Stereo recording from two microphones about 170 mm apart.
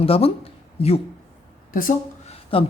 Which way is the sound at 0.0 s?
35° left (ahead or behind).